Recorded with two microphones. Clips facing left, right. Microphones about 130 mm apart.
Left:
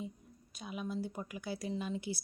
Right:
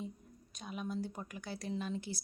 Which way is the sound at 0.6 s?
5° left (ahead or behind).